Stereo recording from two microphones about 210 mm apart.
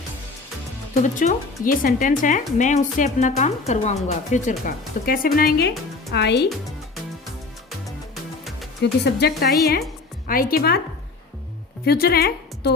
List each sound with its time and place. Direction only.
1.0 s a woman's voice: 35° left (ahead or behind); by 6.5 s 55° left (ahead or behind)
7.9 s music: centre (ahead or behind)
8.8 s a woman's voice: 50° left (ahead or behind)
11.9 s a woman's voice: 45° left (ahead or behind)